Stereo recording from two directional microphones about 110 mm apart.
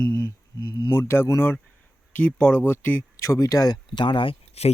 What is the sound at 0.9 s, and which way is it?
Speech, 20° left (ahead or behind).